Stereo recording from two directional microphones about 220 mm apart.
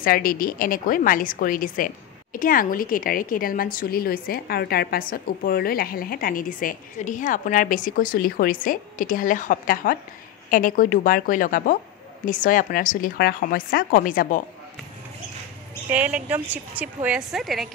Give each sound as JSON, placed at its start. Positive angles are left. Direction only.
{"t": 0.0, "sound": "a woman's voice", "side_deg": 40}
{"t": 15.9, "sound": "a woman's voice", "side_deg": -5}